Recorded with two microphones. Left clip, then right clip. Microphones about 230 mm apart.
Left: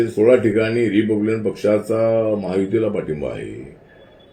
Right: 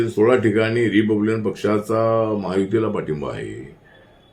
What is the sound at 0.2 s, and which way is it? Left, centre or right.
Speech, centre.